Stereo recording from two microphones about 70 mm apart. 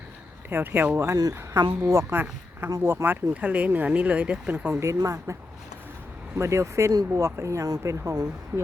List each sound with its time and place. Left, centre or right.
0.5 s speech: right
0.9 s speech: right
2.8 s speech: right
4.7 s speech: right